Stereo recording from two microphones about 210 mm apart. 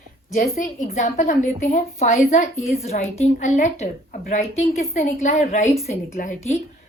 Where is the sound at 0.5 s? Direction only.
35° left (ahead or behind).